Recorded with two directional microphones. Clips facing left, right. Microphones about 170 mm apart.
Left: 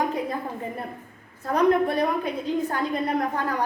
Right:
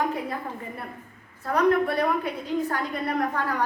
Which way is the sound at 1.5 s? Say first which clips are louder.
Left 1 dB; 20° left (ahead or behind).